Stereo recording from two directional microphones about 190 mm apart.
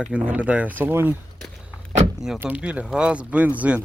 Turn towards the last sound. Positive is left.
turn(degrees=-5)  # may be behind; listen again after turning